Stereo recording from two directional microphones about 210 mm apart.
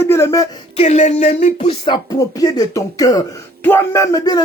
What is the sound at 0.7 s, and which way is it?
Speech, 35° left (ahead or behind).